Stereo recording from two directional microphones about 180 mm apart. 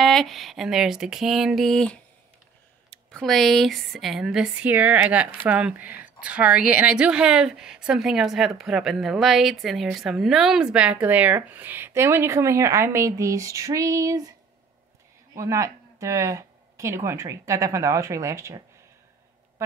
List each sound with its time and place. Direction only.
0.0 s a woman's voice: centre (ahead or behind); by 14.3 s 20° right (ahead or behind)
15.3 s speech: 15° right (ahead or behind)